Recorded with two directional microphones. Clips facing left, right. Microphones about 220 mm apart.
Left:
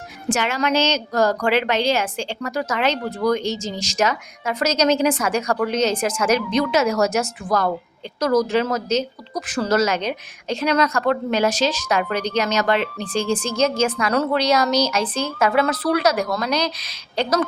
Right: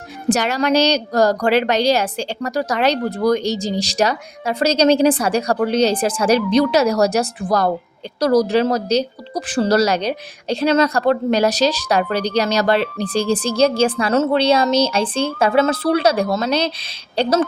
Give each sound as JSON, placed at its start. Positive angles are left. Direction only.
{"t": 0.3, "sound": "speech", "side_deg": -40}